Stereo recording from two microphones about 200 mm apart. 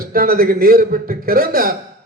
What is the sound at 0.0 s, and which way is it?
A man's voice, 45° right (ahead or behind).